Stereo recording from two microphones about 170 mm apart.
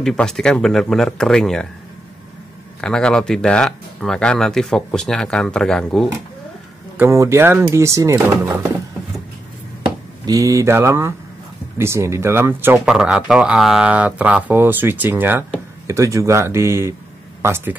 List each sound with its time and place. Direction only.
0.0 s speech: 5° left (ahead or behind)
2.8 s speech: 5° left (ahead or behind)
7.0 s speech: 15° right (ahead or behind)
10.2 s speech: 20° right (ahead or behind)